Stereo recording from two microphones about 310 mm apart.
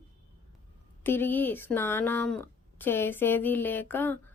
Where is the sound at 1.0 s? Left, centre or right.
Centre.